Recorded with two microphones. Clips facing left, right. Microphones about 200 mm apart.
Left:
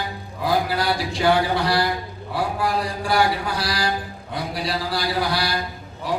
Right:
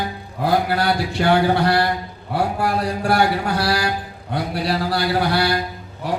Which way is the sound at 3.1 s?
65° right (ahead or behind).